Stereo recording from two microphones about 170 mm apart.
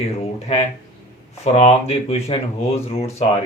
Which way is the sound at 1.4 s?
40° left (ahead or behind).